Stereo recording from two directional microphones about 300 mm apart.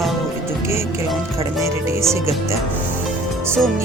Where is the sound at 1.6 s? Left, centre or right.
Centre.